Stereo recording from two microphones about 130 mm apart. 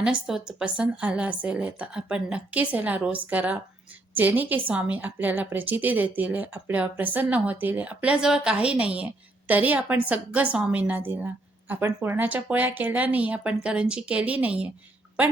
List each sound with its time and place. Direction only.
0.0 s a woman's voice: 5° right (ahead or behind)